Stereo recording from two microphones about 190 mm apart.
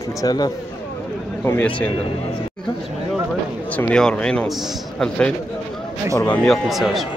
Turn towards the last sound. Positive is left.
turn(degrees=0)  # may be behind; listen again after turning